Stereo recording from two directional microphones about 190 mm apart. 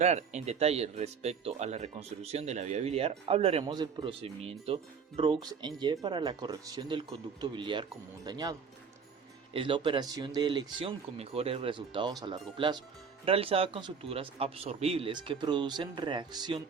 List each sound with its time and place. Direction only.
0.0 s a man's voice: 35° right (ahead or behind)